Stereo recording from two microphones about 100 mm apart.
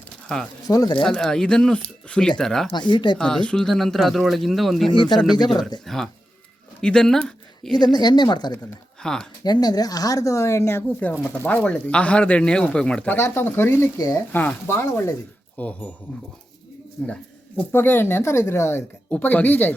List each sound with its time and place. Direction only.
0.3 s speech: 5° left (ahead or behind)
0.7 s speech: 40° left (ahead or behind)
1.0 s speech: 5° left (ahead or behind)
2.7 s a woman's voice: 50° left (ahead or behind)
3.2 s speech: 10° left (ahead or behind)
4.9 s a woman's voice: 50° left (ahead or behind)
5.1 s speech: centre (ahead or behind)
7.8 s a woman's voice: 45° left (ahead or behind)
9.0 s speech: 5° left (ahead or behind)
9.4 s speech: 45° left (ahead or behind); by 13.1 s 10° left (ahead or behind)
13.1 s speech: 25° left (ahead or behind)
15.5 s speech: 15° left (ahead or behind)
17.0 s speech: 10° left (ahead or behind)
17.6 s speech: 20° left (ahead or behind)